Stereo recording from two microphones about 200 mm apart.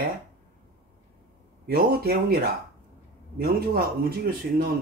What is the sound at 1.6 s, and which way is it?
Speech, 50° right (ahead or behind).